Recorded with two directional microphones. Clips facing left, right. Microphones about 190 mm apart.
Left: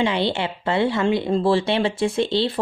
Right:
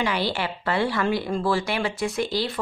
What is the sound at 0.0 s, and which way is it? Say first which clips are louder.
Speech: left 4 dB; 25° left (ahead or behind).